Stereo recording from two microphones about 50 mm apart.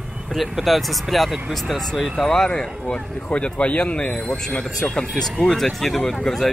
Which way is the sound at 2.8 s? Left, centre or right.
Left.